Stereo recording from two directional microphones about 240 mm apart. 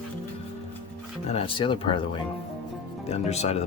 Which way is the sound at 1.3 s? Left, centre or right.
Left.